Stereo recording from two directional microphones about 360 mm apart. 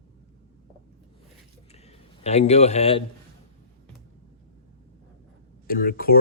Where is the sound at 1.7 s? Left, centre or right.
Centre.